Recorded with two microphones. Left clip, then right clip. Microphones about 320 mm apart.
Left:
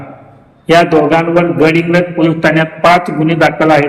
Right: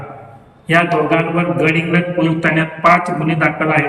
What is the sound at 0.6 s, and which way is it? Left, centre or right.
A man's voice, centre.